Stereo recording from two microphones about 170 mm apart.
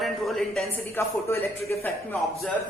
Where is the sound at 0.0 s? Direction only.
Centre (ahead or behind).